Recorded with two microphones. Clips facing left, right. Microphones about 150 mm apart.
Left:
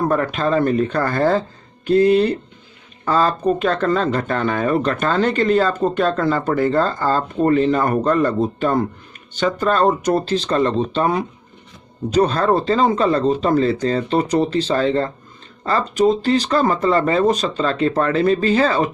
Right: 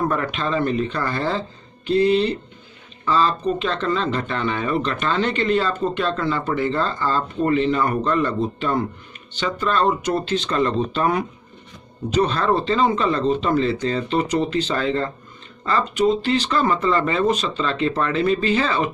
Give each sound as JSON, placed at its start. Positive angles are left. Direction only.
{"t": 0.1, "sound": "speech", "side_deg": 40}
{"t": 12.1, "sound": "speech", "side_deg": 40}